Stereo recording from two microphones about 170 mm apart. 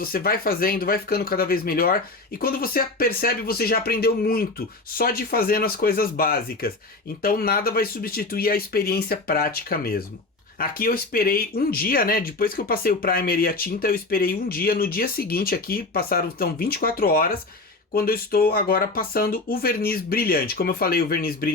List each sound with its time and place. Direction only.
0.0 s speech: 60° left (ahead or behind)